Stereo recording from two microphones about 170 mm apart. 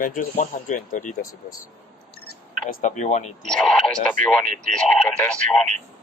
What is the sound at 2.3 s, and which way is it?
Speech, 50° left (ahead or behind).